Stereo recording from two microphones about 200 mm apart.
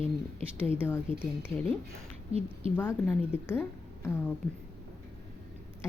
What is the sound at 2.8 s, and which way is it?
Speech, 10° left (ahead or behind).